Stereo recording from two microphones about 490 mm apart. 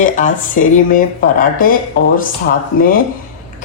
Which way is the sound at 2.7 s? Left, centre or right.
Centre.